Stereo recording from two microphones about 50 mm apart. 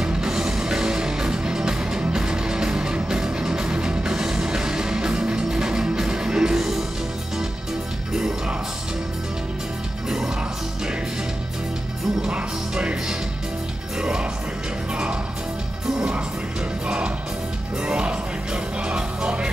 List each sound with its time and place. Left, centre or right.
0.0 s music: centre
8.1 s music: centre
10.0 s music: centre
12.2 s music: centre
13.9 s music: centre
15.9 s music: centre